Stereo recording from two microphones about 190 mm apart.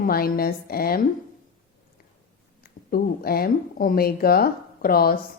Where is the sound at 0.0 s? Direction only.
50° left (ahead or behind).